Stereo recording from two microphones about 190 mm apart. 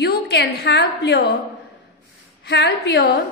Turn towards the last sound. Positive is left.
turn(degrees=55)  # may be behind; listen again after turning